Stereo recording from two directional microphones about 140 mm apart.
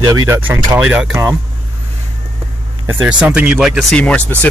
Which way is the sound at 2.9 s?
10° right (ahead or behind).